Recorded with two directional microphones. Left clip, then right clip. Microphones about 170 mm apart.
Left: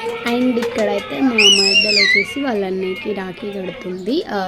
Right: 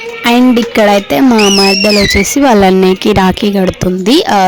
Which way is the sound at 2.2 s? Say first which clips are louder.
Right 14 dB; 70° right (ahead or behind).